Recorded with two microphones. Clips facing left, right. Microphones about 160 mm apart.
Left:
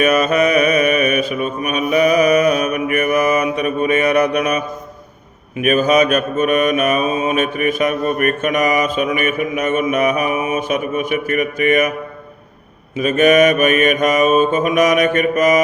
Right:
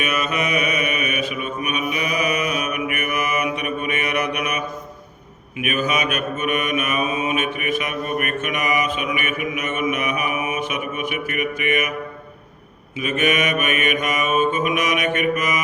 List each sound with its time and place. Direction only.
0.0 s mantra: 40° left (ahead or behind)
5.6 s mantra: 40° left (ahead or behind)
13.0 s mantra: 40° left (ahead or behind)